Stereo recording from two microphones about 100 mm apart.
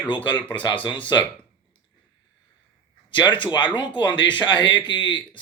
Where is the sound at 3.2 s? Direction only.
50° left (ahead or behind).